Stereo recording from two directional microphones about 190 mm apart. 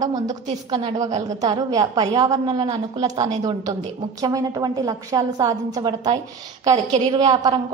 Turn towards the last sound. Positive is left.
turn(degrees=-20)  # may be behind; listen again after turning